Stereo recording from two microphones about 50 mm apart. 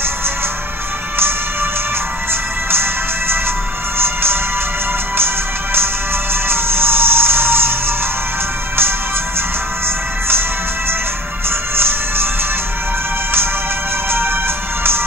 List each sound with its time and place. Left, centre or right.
2.7 s music: right
6.5 s music: right
11.7 s music: right
14.1 s music: right